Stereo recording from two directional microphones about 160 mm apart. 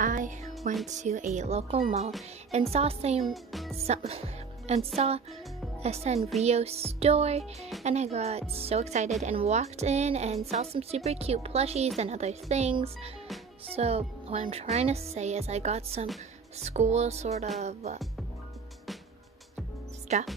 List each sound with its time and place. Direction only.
0.0 s music: 55° right (ahead or behind)
0.8 s speech: 50° right (ahead or behind)
2.7 s music: 40° right (ahead or behind)
3.3 s speech: centre (ahead or behind)
3.7 s music: 40° right (ahead or behind)
7.8 s speech: 45° right (ahead or behind)
11.1 s music: 40° right (ahead or behind)
12.0 s speech: 45° right (ahead or behind)
12.7 s music: 40° right (ahead or behind)
16.5 s speech: 45° right (ahead or behind)
20.1 s speech: 45° right (ahead or behind)